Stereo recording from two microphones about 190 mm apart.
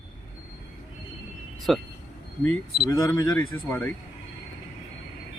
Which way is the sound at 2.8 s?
20° left (ahead or behind).